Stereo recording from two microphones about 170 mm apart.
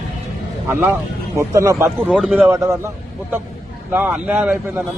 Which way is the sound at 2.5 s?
15° right (ahead or behind).